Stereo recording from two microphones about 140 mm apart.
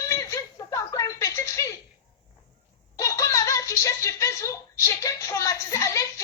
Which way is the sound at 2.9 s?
25° left (ahead or behind).